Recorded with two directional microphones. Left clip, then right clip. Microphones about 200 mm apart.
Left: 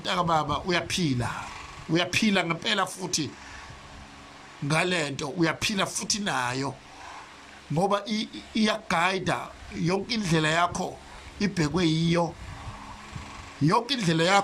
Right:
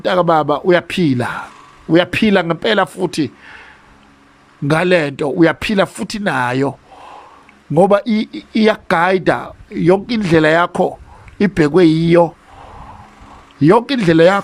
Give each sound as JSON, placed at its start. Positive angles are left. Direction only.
{"t": 0.0, "sound": "speech", "side_deg": -45}
{"t": 4.7, "sound": "speech", "side_deg": -45}
{"t": 13.6, "sound": "speech", "side_deg": -45}